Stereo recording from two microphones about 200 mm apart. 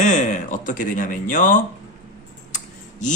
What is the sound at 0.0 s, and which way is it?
Speech, 35° left (ahead or behind).